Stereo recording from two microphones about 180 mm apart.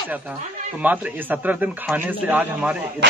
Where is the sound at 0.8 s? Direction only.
10° right (ahead or behind).